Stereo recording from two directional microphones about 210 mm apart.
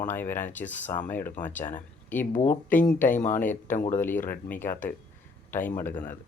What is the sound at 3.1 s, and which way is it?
Speech, 35° left (ahead or behind).